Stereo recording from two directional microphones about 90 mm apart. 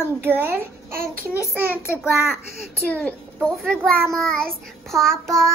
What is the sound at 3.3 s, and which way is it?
A child's voice, 5° left (ahead or behind).